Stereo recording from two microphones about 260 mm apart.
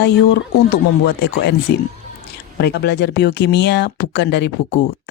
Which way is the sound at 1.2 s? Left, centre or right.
Left.